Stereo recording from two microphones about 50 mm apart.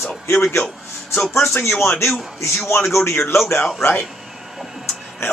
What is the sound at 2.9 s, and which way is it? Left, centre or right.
Speech, left.